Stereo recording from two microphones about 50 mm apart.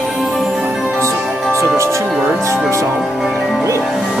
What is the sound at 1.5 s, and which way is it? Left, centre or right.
Music, right.